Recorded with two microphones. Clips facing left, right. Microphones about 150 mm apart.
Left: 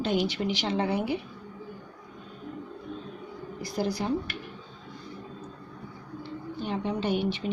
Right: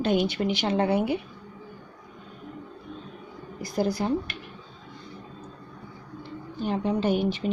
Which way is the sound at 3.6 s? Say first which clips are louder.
Right 4 dB; 50° right (ahead or behind).